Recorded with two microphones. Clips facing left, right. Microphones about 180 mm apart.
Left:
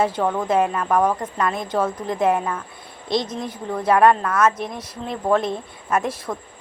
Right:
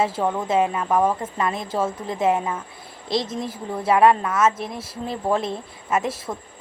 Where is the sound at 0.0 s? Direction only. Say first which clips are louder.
Left 2 dB; 5° right (ahead or behind).